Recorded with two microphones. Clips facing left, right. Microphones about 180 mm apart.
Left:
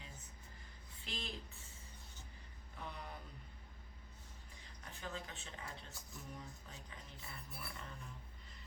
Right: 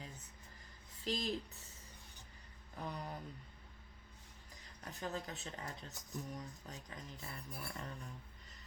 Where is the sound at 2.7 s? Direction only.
40° right (ahead or behind).